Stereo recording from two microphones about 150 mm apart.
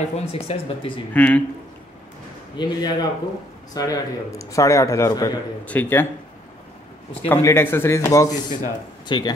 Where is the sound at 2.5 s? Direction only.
30° left (ahead or behind).